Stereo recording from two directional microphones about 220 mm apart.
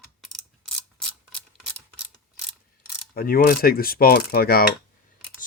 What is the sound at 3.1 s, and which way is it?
Speech, 40° left (ahead or behind).